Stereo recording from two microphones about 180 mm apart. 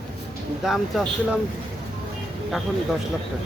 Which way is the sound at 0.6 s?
Centre (ahead or behind).